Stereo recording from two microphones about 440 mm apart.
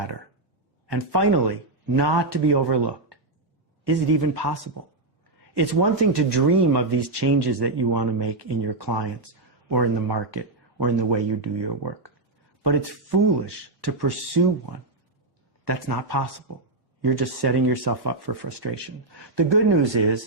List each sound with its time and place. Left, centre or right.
0.9 s speech: right
4.4 s speech: right
15.6 s speech: right